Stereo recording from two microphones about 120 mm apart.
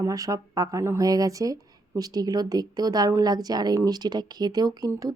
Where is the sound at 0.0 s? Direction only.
30° right (ahead or behind).